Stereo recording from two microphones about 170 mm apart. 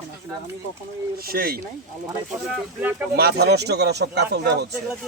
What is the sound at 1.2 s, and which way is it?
Speech, 60° right (ahead or behind).